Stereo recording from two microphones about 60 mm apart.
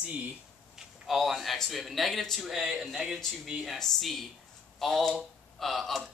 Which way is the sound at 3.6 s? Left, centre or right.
Centre.